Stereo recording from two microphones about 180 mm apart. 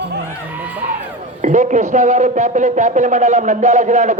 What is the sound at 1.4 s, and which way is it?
Speech, 45° right (ahead or behind).